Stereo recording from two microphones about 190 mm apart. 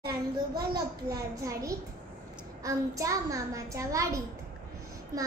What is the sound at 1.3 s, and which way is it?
A child's voice, 15° right (ahead or behind).